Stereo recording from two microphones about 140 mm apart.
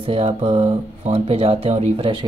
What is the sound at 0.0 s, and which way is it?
Speech, 45° right (ahead or behind).